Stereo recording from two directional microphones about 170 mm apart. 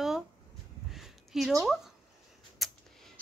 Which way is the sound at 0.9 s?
Centre (ahead or behind).